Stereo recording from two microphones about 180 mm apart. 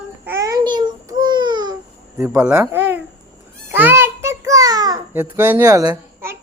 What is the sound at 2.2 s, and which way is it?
Speech, 15° right (ahead or behind).